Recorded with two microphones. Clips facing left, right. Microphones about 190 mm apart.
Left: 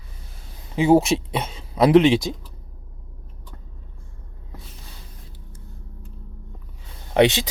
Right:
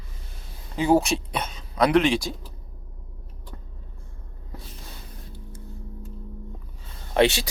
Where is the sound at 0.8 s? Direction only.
20° left (ahead or behind).